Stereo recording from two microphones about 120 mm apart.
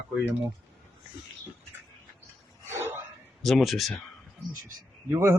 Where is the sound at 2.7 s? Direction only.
20° right (ahead or behind).